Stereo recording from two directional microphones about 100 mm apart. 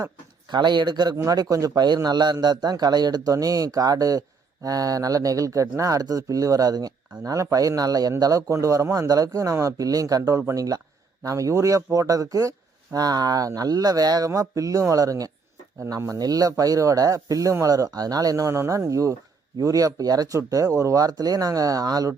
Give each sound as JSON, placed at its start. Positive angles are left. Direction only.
{"t": 0.5, "sound": "speech", "side_deg": -50}